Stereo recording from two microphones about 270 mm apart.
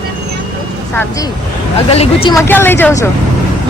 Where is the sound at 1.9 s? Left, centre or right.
Left.